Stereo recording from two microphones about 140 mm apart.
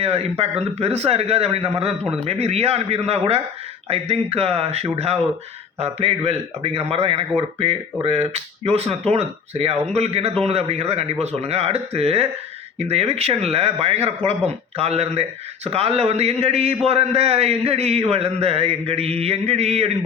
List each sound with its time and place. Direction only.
0.0 s a man's voice: 45° right (ahead or behind)